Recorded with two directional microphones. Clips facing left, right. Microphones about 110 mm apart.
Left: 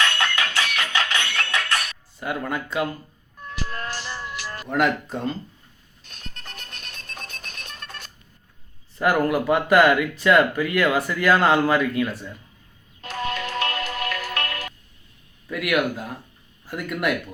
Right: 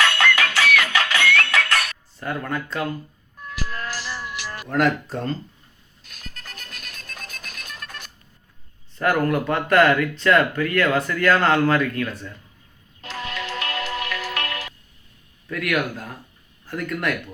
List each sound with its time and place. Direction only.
0.0 s music: 90° right
2.1 s speech: 5° left (ahead or behind)
3.4 s music: 30° left (ahead or behind)
4.7 s speech: centre (ahead or behind)
6.1 s music: 30° left (ahead or behind)
9.0 s speech: 5° left (ahead or behind)
13.2 s music: 35° left (ahead or behind)
15.4 s speech: 5° left (ahead or behind)